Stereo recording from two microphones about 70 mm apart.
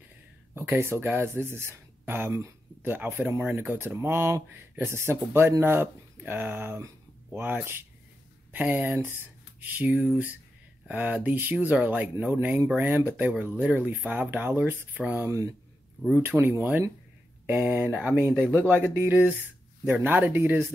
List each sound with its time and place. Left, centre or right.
0.6 s speech: right
11.5 s speech: centre
15.1 s speech: right
16.1 s speech: right